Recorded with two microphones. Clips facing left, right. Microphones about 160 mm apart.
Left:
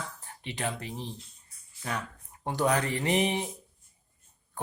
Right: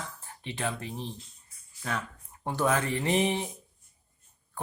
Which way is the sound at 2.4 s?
15° left (ahead or behind).